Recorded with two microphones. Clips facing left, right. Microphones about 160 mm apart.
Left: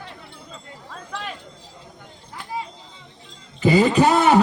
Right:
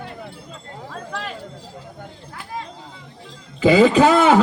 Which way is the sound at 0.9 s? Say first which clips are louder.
Right 2 dB; centre (ahead or behind).